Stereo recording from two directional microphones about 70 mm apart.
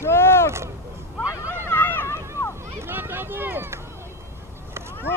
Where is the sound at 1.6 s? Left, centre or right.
Left.